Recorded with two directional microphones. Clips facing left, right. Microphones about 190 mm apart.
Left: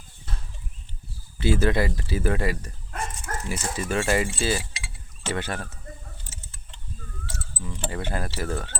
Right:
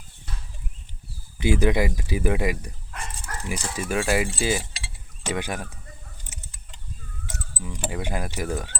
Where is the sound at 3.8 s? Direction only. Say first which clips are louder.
Even; 10° right (ahead or behind).